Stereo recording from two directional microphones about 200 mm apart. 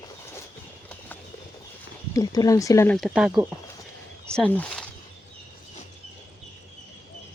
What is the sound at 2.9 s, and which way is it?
Speech, centre (ahead or behind).